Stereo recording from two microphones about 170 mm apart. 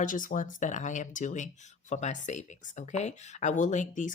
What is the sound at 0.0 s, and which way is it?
Speech, 50° left (ahead or behind).